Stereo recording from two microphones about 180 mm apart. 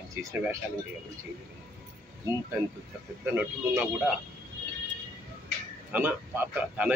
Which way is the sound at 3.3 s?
10° right (ahead or behind).